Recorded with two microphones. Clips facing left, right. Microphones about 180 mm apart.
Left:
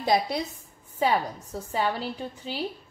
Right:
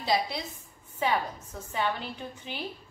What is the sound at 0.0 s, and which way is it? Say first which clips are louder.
Speech: left 4 dB; 50° left (ahead or behind).